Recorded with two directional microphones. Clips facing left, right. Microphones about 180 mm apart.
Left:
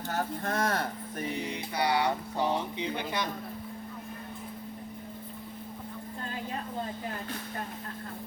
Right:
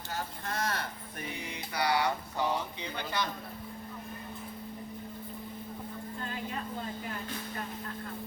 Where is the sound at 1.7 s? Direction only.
25° left (ahead or behind).